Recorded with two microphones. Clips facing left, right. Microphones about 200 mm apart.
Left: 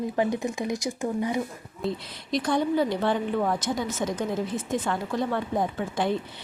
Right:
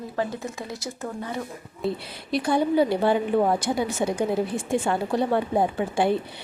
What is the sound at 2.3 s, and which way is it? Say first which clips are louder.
Speech: right 2 dB; 10° right (ahead or behind).